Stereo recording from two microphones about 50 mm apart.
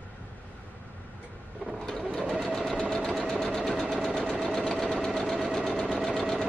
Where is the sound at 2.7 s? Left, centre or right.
Centre.